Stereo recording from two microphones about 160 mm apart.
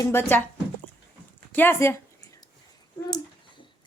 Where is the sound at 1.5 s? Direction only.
10° left (ahead or behind).